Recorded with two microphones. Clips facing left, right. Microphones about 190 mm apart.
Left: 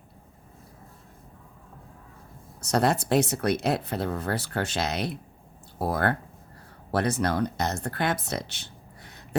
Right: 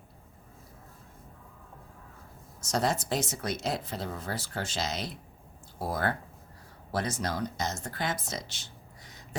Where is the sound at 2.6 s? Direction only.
60° left (ahead or behind).